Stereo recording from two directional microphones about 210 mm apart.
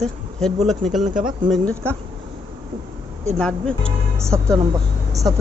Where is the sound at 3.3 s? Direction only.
5° left (ahead or behind).